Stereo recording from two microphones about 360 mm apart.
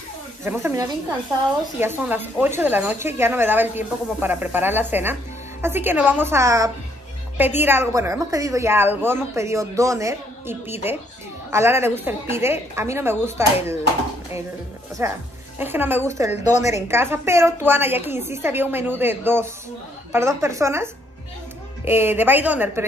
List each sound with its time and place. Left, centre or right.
0.4 s a woman's voice: centre
15.0 s a woman's voice: centre
16.4 s a woman's voice: centre
16.8 s a woman's voice: centre